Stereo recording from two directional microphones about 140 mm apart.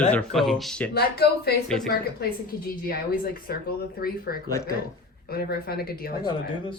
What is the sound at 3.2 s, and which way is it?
Speech, 90° left.